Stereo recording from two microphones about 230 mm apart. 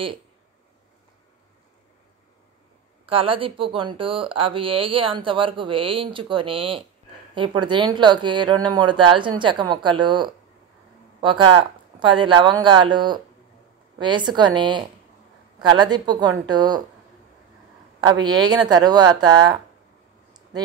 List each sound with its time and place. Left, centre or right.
3.1 s speech: right
18.0 s speech: centre